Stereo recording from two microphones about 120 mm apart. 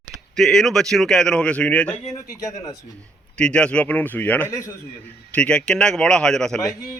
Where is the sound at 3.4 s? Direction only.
10° left (ahead or behind).